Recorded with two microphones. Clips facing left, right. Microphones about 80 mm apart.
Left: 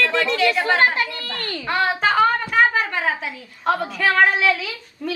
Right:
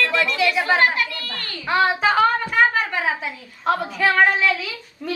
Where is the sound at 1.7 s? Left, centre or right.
Centre.